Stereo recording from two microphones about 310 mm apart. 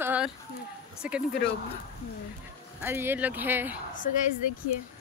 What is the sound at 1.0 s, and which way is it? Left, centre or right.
Speech, centre.